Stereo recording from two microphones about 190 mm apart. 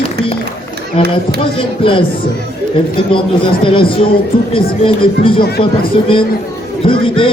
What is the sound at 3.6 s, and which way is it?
Speech, 25° left (ahead or behind).